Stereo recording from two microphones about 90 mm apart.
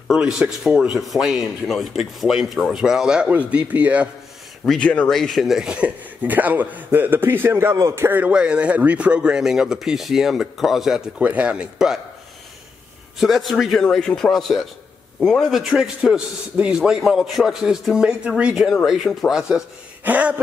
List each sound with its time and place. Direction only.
0.1 s a man's voice: 5° right (ahead or behind)
4.6 s speech: 15° left (ahead or behind)
5.1 s a man's voice: centre (ahead or behind); by 8.2 s 30° right (ahead or behind)
8.2 s speech: 10° right (ahead or behind)
11.1 s speech: 15° right (ahead or behind)
13.2 s a man's voice: centre (ahead or behind)
15.5 s a man's voice: 5° right (ahead or behind)
20.0 s speech: 15° right (ahead or behind)